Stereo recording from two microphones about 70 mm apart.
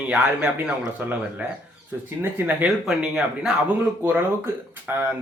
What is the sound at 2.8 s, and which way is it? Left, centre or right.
Speech, centre.